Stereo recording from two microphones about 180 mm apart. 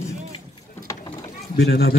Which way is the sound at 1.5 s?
60° left (ahead or behind).